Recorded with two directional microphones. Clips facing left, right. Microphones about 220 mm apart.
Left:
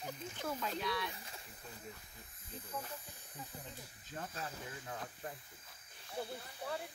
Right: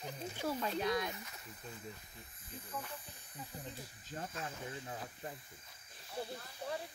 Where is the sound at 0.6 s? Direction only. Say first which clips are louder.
Right 5 dB; 45° right (ahead or behind).